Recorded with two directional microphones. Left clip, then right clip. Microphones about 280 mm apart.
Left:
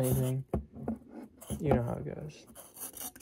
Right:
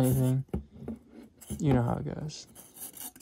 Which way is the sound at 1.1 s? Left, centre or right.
Centre.